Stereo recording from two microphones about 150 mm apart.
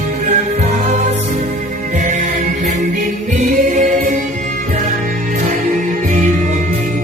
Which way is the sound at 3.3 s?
60° right (ahead or behind).